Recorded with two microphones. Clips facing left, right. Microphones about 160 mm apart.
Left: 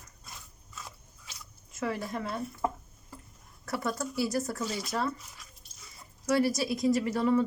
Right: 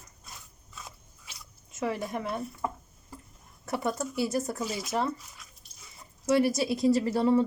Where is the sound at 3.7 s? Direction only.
20° right (ahead or behind).